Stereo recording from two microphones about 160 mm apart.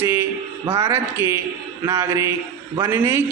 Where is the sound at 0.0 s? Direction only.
15° right (ahead or behind).